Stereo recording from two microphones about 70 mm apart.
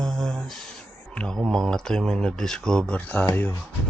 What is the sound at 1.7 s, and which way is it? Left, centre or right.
Speech, centre.